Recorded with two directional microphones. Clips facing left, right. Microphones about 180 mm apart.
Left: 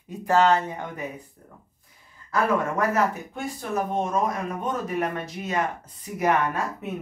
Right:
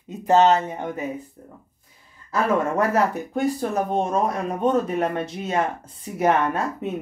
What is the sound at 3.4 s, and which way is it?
Speech, 35° right (ahead or behind).